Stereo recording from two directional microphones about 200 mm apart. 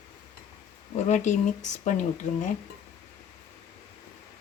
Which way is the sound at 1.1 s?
35° left (ahead or behind).